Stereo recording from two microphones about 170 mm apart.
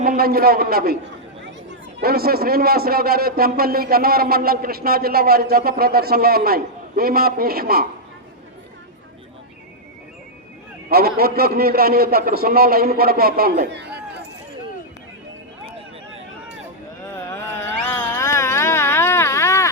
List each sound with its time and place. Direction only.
0.0 s a man's voice: 60° right (ahead or behind)
2.0 s a man's voice: 65° right (ahead or behind)
10.8 s a man's voice: 65° right (ahead or behind); by 14.2 s 80° right
17.2 s a sound: 15° left (ahead or behind)